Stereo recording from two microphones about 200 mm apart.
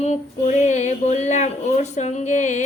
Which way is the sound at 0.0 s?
35° left (ahead or behind).